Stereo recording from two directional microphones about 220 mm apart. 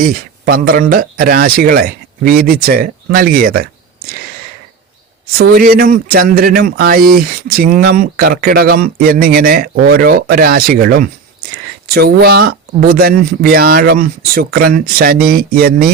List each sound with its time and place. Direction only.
0.0 s speech: 40° right (ahead or behind)
5.4 s speech: 40° right (ahead or behind)